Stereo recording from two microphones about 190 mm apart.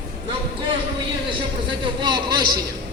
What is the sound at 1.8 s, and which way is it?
Speech, 25° right (ahead or behind).